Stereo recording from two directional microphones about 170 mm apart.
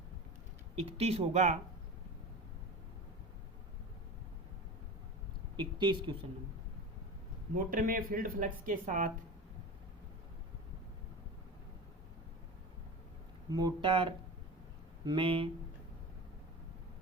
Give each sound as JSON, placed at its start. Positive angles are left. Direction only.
{"t": 0.8, "sound": "speech", "side_deg": -35}
{"t": 5.5, "sound": "speech", "side_deg": -30}
{"t": 7.5, "sound": "speech", "side_deg": -55}
{"t": 13.5, "sound": "speech", "side_deg": -25}